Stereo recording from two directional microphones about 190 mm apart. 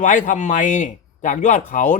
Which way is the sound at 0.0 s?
45° left (ahead or behind).